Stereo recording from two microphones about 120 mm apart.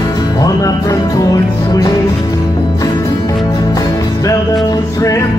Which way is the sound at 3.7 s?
30° left (ahead or behind).